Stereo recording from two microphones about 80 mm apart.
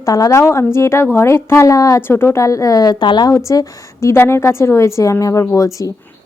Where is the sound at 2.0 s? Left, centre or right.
Left.